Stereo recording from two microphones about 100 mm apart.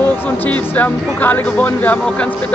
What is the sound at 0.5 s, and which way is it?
Speech, 15° left (ahead or behind).